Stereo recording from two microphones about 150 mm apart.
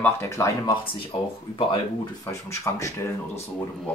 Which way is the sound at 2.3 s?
20° left (ahead or behind).